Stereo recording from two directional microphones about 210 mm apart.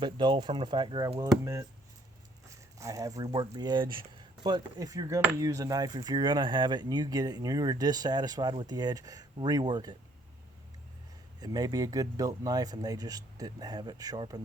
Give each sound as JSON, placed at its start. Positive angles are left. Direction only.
{"t": 0.0, "sound": "cutlery", "side_deg": -20}
{"t": 2.7, "sound": "speech", "side_deg": -15}
{"t": 4.4, "sound": "cutlery", "side_deg": -20}
{"t": 11.3, "sound": "speech", "side_deg": -20}